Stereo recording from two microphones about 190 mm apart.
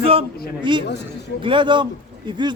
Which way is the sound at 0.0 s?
30° right (ahead or behind).